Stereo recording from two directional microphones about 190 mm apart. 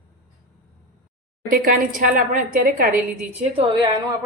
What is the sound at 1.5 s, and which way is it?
A woman's voice, 45° right (ahead or behind).